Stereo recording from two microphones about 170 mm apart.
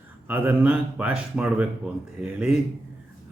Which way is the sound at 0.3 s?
10° right (ahead or behind).